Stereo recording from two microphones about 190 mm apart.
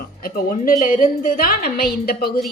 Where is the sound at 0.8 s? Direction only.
45° left (ahead or behind).